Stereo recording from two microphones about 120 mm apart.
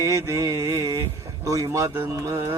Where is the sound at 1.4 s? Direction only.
30° right (ahead or behind).